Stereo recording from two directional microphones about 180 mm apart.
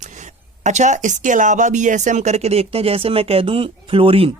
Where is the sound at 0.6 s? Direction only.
40° right (ahead or behind).